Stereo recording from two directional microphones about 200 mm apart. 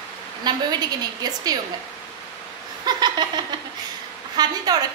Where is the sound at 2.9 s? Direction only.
20° right (ahead or behind).